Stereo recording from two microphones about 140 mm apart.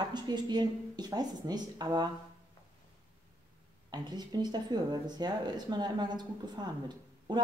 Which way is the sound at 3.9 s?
30° right (ahead or behind).